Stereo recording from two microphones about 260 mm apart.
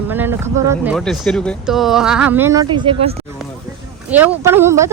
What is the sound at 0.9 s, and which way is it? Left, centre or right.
Speech, centre.